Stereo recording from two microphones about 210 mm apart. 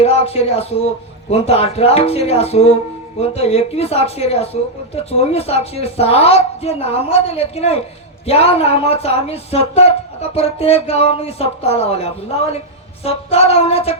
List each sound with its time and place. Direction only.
0.0 s speech: 30° left (ahead or behind)